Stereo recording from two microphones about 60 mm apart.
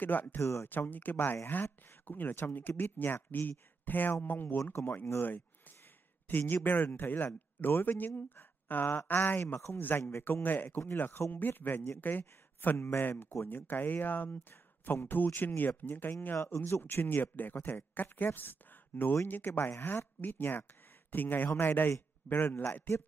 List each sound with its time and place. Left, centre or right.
0.0 s speech: left
0.4 s speech: left
0.7 s speech: left
6.2 s speech: left
16.4 s speech: left